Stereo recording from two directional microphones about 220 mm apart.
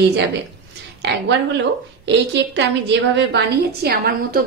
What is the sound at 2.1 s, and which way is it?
A woman's voice, 50° right (ahead or behind).